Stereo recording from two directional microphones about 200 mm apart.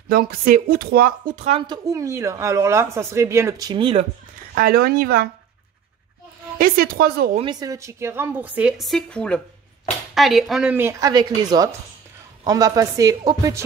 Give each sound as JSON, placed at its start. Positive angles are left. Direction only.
{"t": 0.1, "sound": "speech", "side_deg": -50}
{"t": 1.7, "sound": "speech", "side_deg": -15}
{"t": 4.6, "sound": "speech", "side_deg": -50}
{"t": 6.6, "sound": "speech", "side_deg": -50}
{"t": 7.3, "sound": "speech", "side_deg": -20}